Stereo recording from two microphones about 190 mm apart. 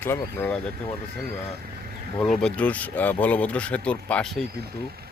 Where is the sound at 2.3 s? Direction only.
5° left (ahead or behind).